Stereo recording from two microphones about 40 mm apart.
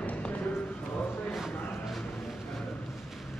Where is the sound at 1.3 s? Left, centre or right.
Centre.